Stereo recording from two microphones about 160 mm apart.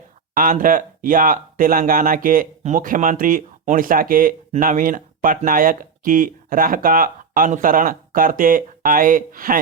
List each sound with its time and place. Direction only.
0.3 s speech: 60° right (ahead or behind)